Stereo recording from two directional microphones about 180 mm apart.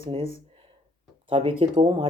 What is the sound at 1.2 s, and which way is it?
Speech, 30° right (ahead or behind).